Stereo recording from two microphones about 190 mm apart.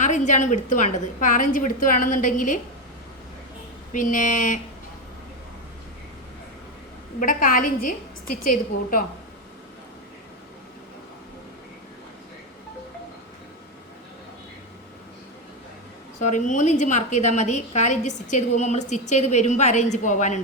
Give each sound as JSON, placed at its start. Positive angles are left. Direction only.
{"t": 0.0, "sound": "a woman's voice", "side_deg": 40}
{"t": 3.9, "sound": "a woman's voice", "side_deg": 40}
{"t": 7.2, "sound": "a woman's voice", "side_deg": 45}
{"t": 16.2, "sound": "a woman's voice", "side_deg": 40}